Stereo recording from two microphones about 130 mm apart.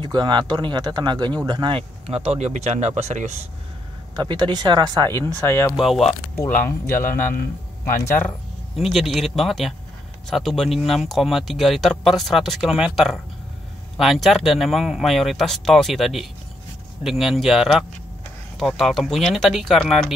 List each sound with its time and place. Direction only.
0.0 s speech: 35° right (ahead or behind); by 3.4 s 60° right (ahead or behind)
4.1 s speech: 35° right (ahead or behind)
5.0 s speech: 20° left (ahead or behind)
5.8 s speech: centre (ahead or behind)
6.6 s speech: 15° left (ahead or behind)
8.7 s speech: centre (ahead or behind)